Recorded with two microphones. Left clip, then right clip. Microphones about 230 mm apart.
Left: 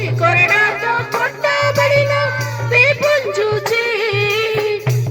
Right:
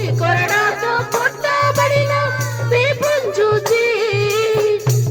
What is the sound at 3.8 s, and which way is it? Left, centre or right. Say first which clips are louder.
Music: even; centre.